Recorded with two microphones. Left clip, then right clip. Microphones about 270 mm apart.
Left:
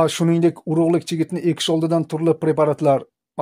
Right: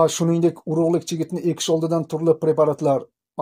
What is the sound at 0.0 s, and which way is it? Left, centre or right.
Speech, left.